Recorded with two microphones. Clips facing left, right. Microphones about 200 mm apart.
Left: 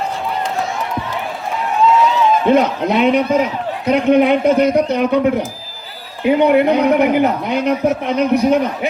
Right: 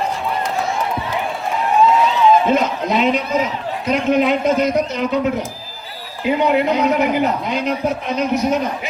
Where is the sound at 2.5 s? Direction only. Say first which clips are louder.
Left 4 dB; 60° left (ahead or behind).